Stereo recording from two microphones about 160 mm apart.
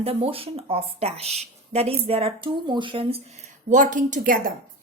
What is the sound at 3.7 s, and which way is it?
Speech, 55° right (ahead or behind).